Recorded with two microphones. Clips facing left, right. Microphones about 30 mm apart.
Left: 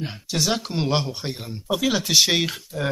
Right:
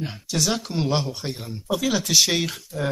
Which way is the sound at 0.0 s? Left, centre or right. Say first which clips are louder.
Even; centre.